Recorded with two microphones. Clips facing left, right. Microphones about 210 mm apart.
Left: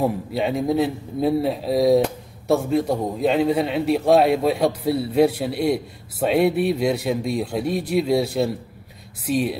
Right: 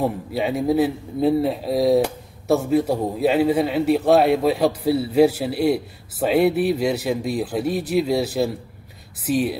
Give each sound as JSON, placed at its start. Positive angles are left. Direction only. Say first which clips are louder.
{"t": 0.0, "sound": "a man's voice", "louder": "left 1 dB", "side_deg": 0}